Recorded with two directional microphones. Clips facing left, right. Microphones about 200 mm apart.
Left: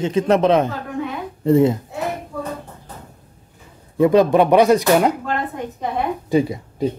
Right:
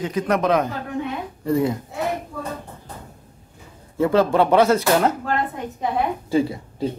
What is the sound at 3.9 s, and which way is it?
Speech, 15° left (ahead or behind).